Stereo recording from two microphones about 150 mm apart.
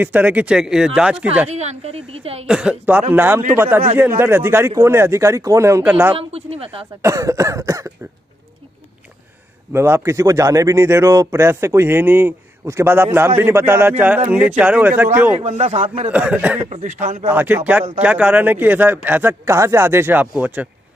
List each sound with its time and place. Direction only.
0.0 s speech: 10° right (ahead or behind)
1.5 s a woman's voice: 45° right (ahead or behind)
2.4 s speech: 5° right (ahead or behind)
6.1 s speech: 40° right (ahead or behind)
7.0 s cough: 20° right (ahead or behind)
9.7 s speech: 15° right (ahead or behind)
15.4 s a woman's voice: 50° right (ahead or behind)
16.1 s speech: 10° right (ahead or behind)
16.6 s a woman's voice: 55° right (ahead or behind)
17.3 s speech: 10° right (ahead or behind)